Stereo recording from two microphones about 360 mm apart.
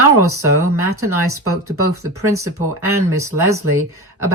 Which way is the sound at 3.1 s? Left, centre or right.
Right.